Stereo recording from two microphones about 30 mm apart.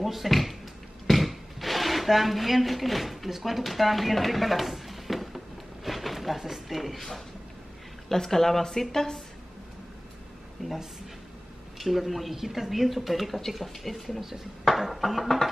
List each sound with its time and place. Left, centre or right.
0.0 s speech: centre
8.1 s speech: centre
10.6 s speech: centre
11.8 s speech: centre
14.2 s speech: centre